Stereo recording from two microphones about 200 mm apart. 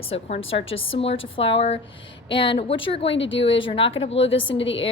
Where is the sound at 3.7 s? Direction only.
25° left (ahead or behind).